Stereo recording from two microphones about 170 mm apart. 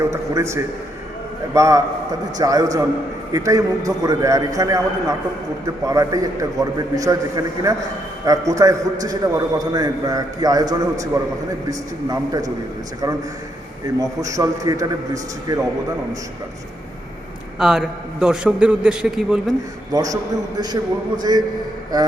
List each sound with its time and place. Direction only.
0.0 s a man's voice: 15° right (ahead or behind)
13.8 s a man's voice: 20° right (ahead or behind)
17.6 s a man's voice: 5° right (ahead or behind)
19.9 s a man's voice: 20° right (ahead or behind)
21.2 s a man's voice: 25° right (ahead or behind)